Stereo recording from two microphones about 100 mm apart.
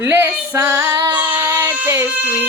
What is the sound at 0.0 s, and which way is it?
Female singing, 20° right (ahead or behind).